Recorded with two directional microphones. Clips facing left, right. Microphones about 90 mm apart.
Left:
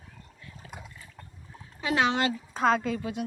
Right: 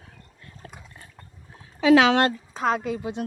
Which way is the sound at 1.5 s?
85° right.